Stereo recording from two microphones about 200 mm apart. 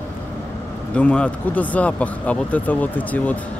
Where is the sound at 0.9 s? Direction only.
5° left (ahead or behind).